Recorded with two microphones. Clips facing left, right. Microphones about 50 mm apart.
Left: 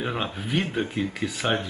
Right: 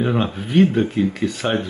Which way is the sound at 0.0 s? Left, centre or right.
Centre.